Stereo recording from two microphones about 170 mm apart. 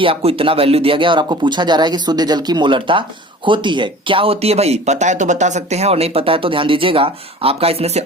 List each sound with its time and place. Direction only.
0.0 s speech: 35° right (ahead or behind)